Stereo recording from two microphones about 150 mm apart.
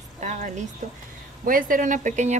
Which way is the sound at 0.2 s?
55° right (ahead or behind).